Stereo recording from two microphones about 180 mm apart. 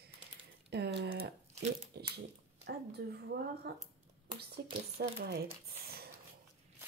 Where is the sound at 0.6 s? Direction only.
70° right (ahead or behind).